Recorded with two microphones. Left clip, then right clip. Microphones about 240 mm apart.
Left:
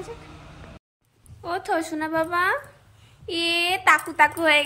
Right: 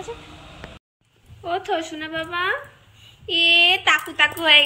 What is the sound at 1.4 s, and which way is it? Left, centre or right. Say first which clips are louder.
A woman's voice: right 1 dB; centre.